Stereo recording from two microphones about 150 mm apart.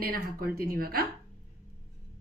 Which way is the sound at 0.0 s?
75° right (ahead or behind).